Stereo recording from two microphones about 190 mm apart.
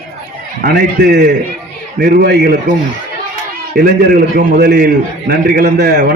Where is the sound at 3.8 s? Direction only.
55° right (ahead or behind).